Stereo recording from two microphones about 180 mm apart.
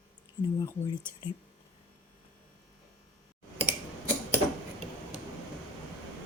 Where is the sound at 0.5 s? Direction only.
20° left (ahead or behind).